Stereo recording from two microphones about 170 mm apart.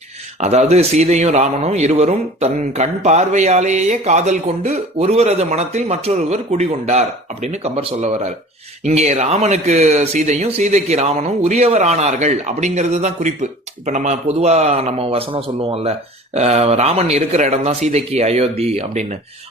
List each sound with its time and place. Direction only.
0.3 s a man's voice: 40° right (ahead or behind)